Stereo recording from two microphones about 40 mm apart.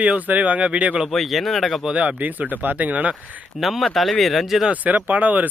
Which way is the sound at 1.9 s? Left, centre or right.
Right.